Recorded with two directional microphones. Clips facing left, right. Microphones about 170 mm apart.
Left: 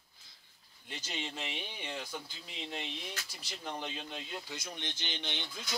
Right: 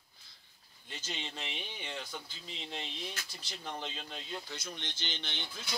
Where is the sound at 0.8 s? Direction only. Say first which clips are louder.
Left 2 dB; 10° left (ahead or behind).